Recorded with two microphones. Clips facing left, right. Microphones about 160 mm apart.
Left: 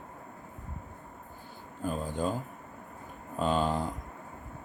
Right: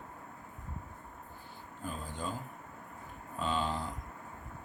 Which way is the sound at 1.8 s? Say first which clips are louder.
Left 8 dB; 50° left (ahead or behind).